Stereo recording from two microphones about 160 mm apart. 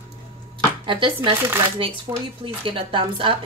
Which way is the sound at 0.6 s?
30° right (ahead or behind).